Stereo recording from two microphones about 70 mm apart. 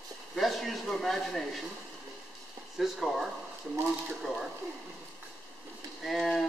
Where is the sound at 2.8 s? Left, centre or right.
Centre.